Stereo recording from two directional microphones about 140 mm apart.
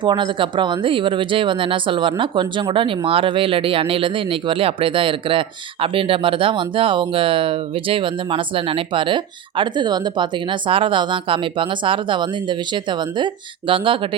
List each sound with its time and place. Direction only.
0.0 s speech: 35° right (ahead or behind)